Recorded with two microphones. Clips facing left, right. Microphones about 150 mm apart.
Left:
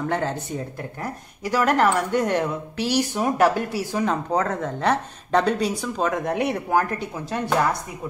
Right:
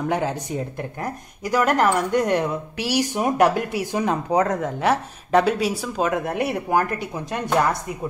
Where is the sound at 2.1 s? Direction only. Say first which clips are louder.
Right 2 dB; 10° right (ahead or behind).